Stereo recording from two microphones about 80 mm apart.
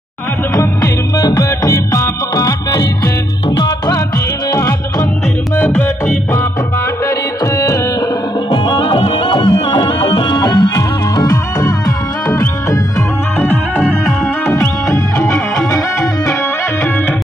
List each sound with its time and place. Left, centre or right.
1.2 s music: left
5.6 s music: left
8.5 s music: left
10.3 s music: left
11.1 s music: left
14.5 s music: left